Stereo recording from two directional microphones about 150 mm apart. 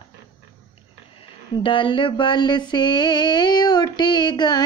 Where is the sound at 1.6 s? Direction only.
35° left (ahead or behind).